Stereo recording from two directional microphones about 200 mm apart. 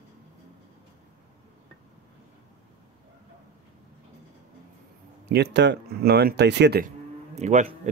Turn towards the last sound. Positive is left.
turn(degrees=-35)  # may be behind; listen again after turning